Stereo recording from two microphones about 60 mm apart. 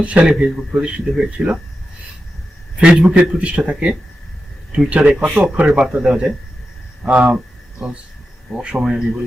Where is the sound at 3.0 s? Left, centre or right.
Right.